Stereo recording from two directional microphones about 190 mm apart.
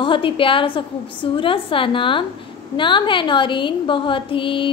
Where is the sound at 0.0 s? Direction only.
25° left (ahead or behind).